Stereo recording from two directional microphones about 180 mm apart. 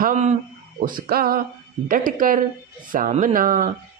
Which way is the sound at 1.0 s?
55° right (ahead or behind).